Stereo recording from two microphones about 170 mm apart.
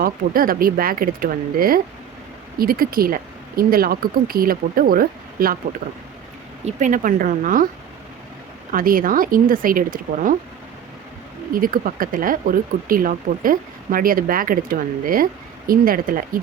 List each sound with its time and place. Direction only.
0.0 s speech: 55° right (ahead or behind)
6.7 s speech: 45° right (ahead or behind)
8.7 s speech: 55° right (ahead or behind)
11.5 s speech: 55° right (ahead or behind)